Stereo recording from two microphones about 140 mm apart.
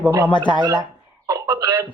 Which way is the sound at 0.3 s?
35° left (ahead or behind).